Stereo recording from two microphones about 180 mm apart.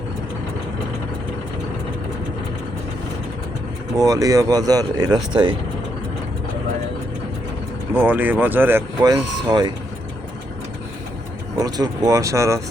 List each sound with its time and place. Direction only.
3.9 s speech: 20° right (ahead or behind)
7.9 s speech: 10° right (ahead or behind)
11.6 s speech: 20° right (ahead or behind)